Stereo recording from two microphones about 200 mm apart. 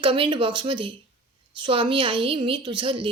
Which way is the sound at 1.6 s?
25° right (ahead or behind).